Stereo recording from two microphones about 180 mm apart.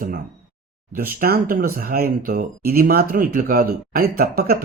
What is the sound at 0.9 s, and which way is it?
Speech, 55° right (ahead or behind).